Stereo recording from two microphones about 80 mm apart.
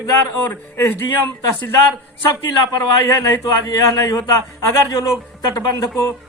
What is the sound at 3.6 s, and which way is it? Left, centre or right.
A man's voice, left.